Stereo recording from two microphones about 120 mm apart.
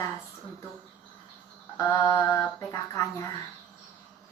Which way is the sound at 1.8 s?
25° left (ahead or behind).